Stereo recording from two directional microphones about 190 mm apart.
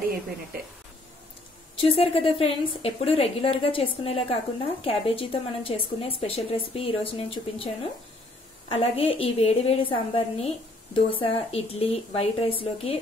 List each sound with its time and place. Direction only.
1.8 s a woman's voice: 30° left (ahead or behind)